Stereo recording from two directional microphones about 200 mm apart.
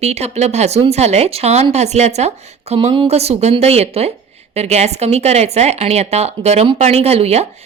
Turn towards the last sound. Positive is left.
turn(degrees=-30)  # may be behind; listen again after turning